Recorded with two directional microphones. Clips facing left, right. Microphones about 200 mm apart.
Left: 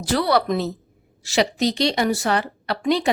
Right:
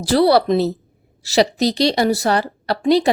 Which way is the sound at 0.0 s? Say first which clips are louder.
Right 6 dB; 35° right (ahead or behind).